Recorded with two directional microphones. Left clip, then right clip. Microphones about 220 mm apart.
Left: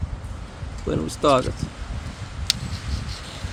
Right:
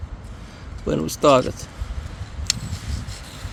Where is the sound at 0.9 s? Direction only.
35° right (ahead or behind).